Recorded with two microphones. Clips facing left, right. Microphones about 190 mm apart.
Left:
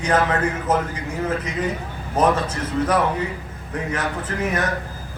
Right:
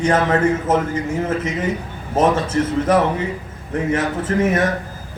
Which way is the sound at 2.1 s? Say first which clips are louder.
Right 3 dB; 25° right (ahead or behind).